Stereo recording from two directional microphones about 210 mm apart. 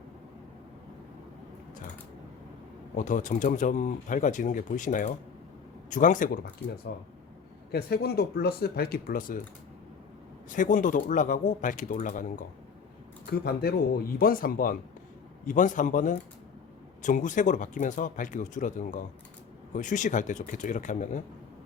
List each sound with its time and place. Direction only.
2.9 s speech: 40° left (ahead or behind)
10.5 s speech: 40° left (ahead or behind)
13.3 s speech: 45° left (ahead or behind)